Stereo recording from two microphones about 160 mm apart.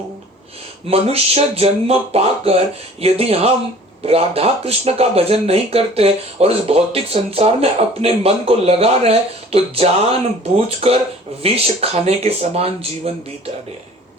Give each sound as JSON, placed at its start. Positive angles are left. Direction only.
{"t": 0.9, "sound": "speech", "side_deg": -40}